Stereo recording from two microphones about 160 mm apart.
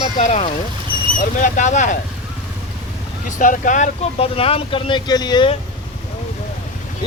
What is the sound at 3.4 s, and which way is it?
Speech, 55° left (ahead or behind).